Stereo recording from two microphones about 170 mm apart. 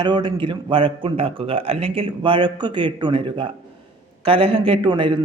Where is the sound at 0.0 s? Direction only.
25° right (ahead or behind).